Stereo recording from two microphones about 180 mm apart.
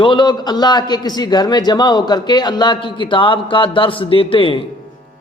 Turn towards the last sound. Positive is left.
turn(degrees=30)  # may be behind; listen again after turning